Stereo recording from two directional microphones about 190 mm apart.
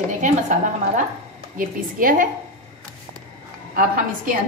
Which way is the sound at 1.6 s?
45° right (ahead or behind).